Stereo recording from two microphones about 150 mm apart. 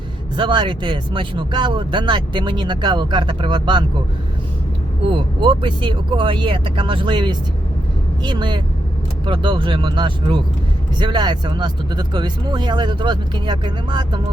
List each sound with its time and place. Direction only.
0.3 s speech: 30° right (ahead or behind)
5.1 s speech: 30° right (ahead or behind)